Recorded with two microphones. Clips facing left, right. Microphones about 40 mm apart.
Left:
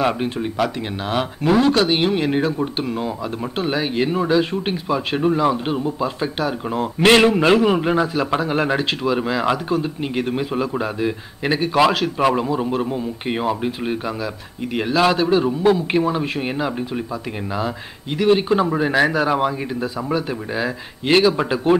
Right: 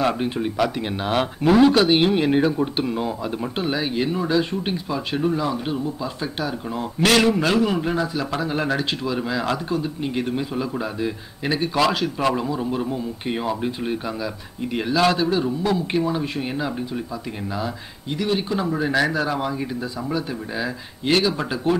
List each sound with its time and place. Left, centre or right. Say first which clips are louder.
0.0 s a man's voice: left 1 dB; centre
3.5 s speech: left 4 dB; centre
12.5 s speech: left 3 dB; left
15.2 s speech: left 5 dB; left
18.1 s speech: left 7 dB; left
18.7 s speech: left 3 dB; left